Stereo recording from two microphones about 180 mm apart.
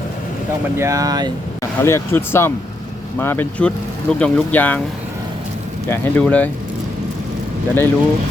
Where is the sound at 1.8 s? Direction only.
15° left (ahead or behind).